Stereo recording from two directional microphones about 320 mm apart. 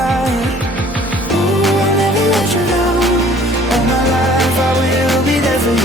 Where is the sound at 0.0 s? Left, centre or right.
Centre.